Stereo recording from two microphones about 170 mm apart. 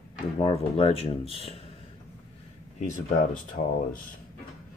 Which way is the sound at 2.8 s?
50° left (ahead or behind).